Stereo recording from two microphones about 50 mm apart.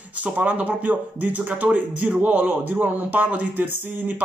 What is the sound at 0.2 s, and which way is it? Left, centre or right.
Speech, right.